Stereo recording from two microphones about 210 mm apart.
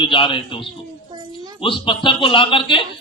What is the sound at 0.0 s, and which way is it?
Speech, 25° left (ahead or behind).